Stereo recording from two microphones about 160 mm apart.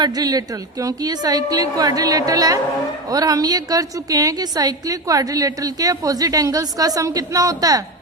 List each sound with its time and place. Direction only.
0.0 s a woman's voice: 25° right (ahead or behind)